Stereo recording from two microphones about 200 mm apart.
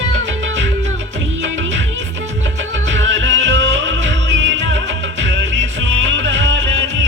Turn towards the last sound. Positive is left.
turn(degrees=-65)  # may be behind; listen again after turning